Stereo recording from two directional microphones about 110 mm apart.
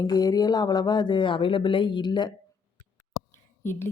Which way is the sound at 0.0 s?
35° left (ahead or behind).